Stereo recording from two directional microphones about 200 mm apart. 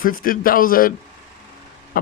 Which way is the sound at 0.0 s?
45° left (ahead or behind).